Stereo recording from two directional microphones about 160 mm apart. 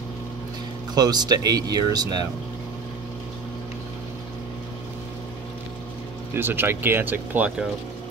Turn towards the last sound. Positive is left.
turn(degrees=-10)  # may be behind; listen again after turning